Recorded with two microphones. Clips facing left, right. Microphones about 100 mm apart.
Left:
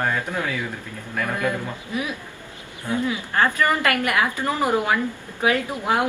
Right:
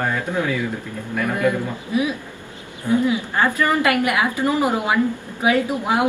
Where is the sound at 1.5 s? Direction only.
20° right (ahead or behind).